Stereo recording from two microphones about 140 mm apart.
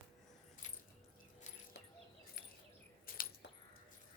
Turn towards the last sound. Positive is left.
turn(degrees=90)